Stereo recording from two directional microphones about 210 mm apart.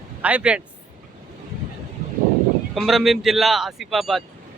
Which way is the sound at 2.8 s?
Centre (ahead or behind).